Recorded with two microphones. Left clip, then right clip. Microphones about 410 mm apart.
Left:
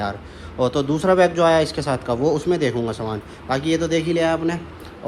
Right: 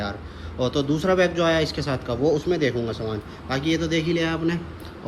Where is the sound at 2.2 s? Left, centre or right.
Left.